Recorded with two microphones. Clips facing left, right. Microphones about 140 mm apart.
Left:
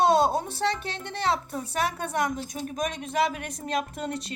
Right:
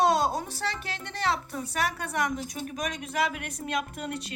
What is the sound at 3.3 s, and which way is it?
Speech, 35° left (ahead or behind).